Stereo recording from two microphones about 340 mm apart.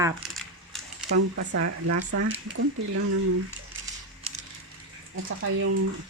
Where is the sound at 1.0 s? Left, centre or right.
Right.